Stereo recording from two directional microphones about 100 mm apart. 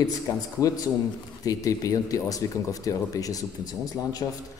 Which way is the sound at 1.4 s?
35° left (ahead or behind).